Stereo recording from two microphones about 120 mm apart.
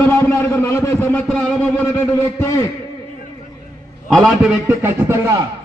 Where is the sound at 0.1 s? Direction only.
15° left (ahead or behind).